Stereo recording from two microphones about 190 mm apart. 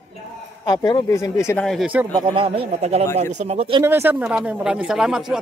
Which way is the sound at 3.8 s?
10° right (ahead or behind).